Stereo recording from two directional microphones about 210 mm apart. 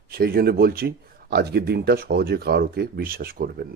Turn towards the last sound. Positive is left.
turn(degrees=-45)  # may be behind; listen again after turning